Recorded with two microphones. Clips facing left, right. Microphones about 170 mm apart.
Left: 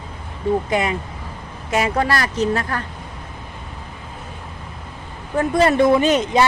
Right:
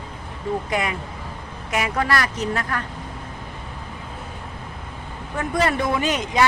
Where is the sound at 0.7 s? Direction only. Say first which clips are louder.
Left 4 dB; 25° left (ahead or behind).